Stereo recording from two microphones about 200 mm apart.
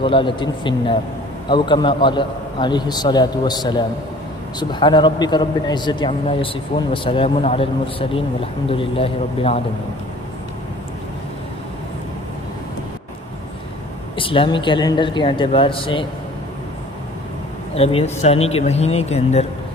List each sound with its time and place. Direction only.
0.0 s a man's voice: 25° left (ahead or behind)
14.2 s a man's voice: 25° left (ahead or behind)
17.7 s speech: 30° left (ahead or behind)